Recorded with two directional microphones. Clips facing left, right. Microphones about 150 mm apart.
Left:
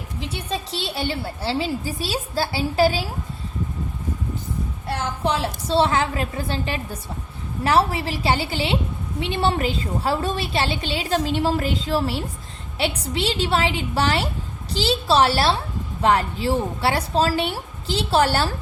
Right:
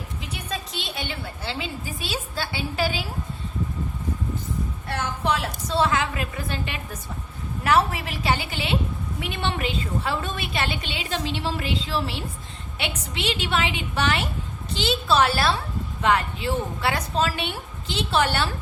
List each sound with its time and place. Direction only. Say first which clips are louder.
0.2 s a woman's voice: left 6 dB; 30° left (ahead or behind)
4.9 s a woman's voice: left 2 dB; 30° left (ahead or behind)